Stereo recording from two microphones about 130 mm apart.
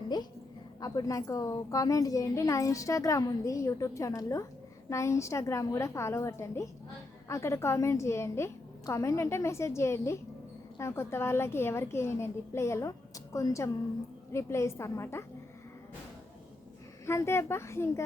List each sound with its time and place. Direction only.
0.1 s a woman's voice: 35° left (ahead or behind)
17.1 s a woman's voice: 20° left (ahead or behind)